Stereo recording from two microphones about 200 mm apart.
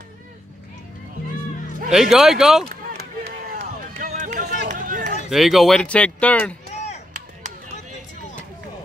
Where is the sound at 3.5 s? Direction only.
40° right (ahead or behind).